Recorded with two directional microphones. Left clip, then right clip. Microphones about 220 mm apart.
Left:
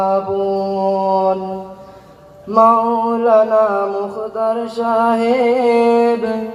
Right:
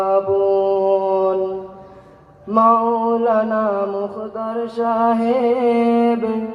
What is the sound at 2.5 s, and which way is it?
Mantra, 35° right (ahead or behind).